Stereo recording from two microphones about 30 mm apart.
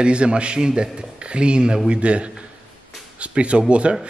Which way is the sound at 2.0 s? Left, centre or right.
Right.